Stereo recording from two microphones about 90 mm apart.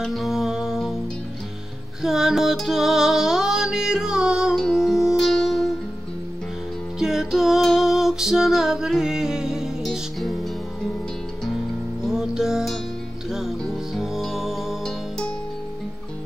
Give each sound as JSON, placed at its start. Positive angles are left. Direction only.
{"t": 0.0, "sound": "music", "side_deg": 0}
{"t": 2.0, "sound": "music", "side_deg": -5}
{"t": 7.0, "sound": "music", "side_deg": -5}
{"t": 12.1, "sound": "music", "side_deg": -5}